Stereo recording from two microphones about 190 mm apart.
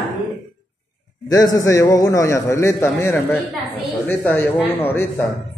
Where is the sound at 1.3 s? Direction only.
20° left (ahead or behind).